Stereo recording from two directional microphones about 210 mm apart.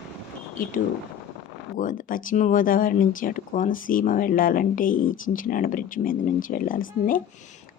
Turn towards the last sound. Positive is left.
turn(degrees=40)  # may be behind; listen again after turning